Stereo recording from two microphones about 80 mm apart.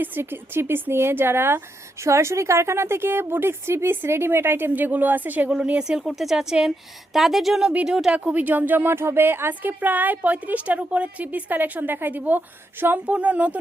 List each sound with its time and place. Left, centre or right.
0.0 s speech: right